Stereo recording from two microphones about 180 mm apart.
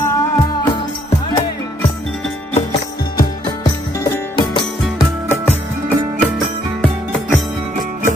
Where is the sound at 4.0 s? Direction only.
20° left (ahead or behind).